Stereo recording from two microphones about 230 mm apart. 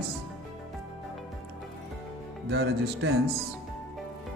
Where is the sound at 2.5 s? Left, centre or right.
Right.